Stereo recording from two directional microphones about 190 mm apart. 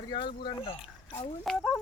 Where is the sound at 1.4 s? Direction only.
Centre (ahead or behind).